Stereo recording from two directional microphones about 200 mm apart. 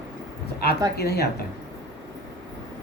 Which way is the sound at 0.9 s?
55° left (ahead or behind).